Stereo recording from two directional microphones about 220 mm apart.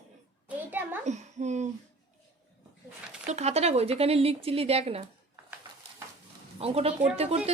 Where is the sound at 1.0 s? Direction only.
30° right (ahead or behind).